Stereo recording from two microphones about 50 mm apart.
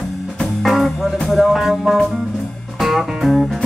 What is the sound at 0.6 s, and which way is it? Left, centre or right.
Music, centre.